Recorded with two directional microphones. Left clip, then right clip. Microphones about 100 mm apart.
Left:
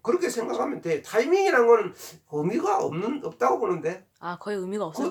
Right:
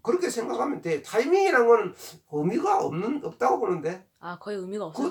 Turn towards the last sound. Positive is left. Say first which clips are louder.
# left 2 dB
turn(degrees=35)  # may be behind; listen again after turning